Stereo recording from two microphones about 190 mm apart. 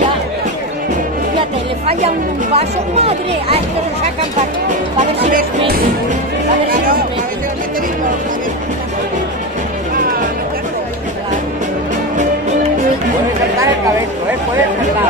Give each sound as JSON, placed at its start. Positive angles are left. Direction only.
{"t": 1.9, "sound": "speech", "side_deg": -35}